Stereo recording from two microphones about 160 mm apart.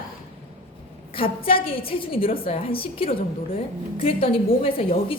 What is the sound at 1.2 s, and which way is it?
A woman's voice, 35° left (ahead or behind).